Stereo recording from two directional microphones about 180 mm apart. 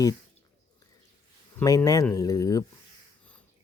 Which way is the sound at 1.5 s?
20° left (ahead or behind).